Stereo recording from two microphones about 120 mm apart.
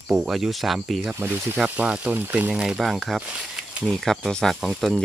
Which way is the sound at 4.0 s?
5° left (ahead or behind).